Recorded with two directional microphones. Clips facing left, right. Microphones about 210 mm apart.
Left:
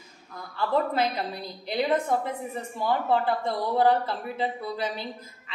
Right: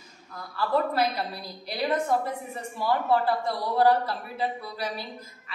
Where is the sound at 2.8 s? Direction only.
20° left (ahead or behind).